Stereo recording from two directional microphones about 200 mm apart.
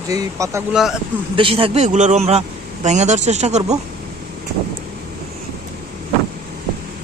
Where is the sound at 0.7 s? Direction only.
Centre (ahead or behind).